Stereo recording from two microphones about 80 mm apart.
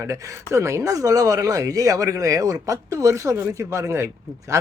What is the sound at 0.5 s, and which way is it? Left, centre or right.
Speech, right.